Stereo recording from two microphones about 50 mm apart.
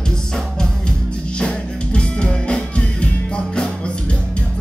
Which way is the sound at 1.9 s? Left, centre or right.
Centre.